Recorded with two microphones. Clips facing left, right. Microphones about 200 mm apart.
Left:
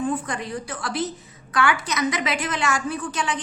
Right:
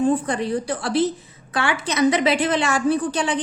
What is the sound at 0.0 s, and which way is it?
A woman's voice, 30° right (ahead or behind).